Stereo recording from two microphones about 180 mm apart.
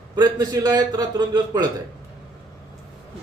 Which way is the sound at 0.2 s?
20° right (ahead or behind).